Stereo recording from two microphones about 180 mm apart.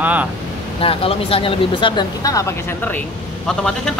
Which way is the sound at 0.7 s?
30° left (ahead or behind).